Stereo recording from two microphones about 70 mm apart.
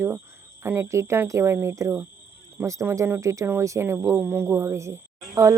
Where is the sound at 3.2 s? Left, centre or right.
Right.